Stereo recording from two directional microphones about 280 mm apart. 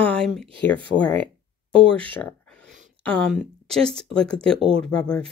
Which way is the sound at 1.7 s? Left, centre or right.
Centre.